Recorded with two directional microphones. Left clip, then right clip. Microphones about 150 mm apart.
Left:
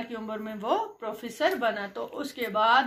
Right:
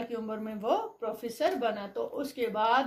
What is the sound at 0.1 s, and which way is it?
Speech, 35° right (ahead or behind).